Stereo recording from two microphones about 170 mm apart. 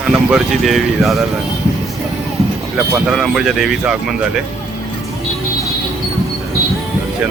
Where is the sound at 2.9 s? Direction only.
5° right (ahead or behind).